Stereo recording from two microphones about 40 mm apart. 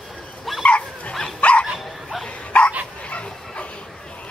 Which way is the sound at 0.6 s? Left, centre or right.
Left.